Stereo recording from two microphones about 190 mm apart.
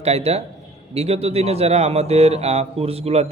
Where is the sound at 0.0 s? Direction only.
35° right (ahead or behind).